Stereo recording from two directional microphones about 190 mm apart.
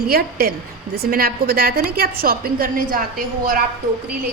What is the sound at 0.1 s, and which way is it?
A woman's voice, 55° right (ahead or behind).